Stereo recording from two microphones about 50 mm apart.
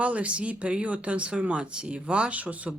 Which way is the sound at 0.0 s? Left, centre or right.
Right.